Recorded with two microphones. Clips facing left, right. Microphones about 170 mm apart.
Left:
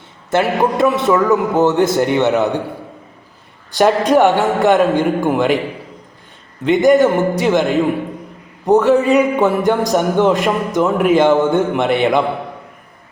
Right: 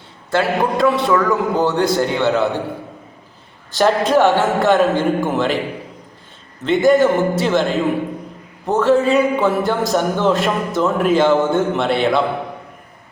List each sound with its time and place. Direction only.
0.3 s a man's voice: 20° left (ahead or behind)
3.8 s a man's voice: 15° left (ahead or behind)
6.7 s a man's voice: 15° left (ahead or behind)